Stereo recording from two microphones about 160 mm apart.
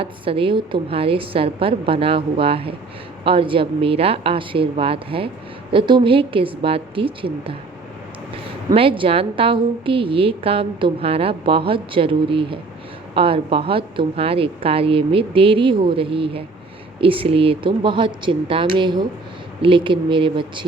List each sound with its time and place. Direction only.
0.0 s a woman's voice: 35° right (ahead or behind)
8.7 s a woman's voice: 35° right (ahead or behind)